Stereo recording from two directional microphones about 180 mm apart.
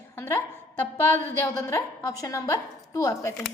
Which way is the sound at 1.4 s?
15° left (ahead or behind).